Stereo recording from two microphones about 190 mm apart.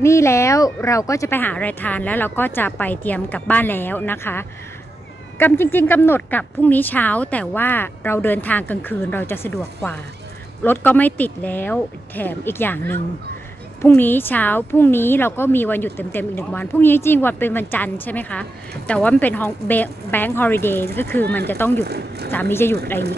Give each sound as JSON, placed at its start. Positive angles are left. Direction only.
{"t": 0.0, "sound": "a woman's voice", "side_deg": 15}
{"t": 10.6, "sound": "a woman's voice", "side_deg": 10}
{"t": 21.8, "sound": "speech", "side_deg": -55}
{"t": 22.3, "sound": "a woman's voice", "side_deg": 10}